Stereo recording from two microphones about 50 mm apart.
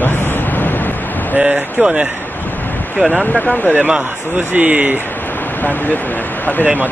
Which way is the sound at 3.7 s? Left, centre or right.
Centre.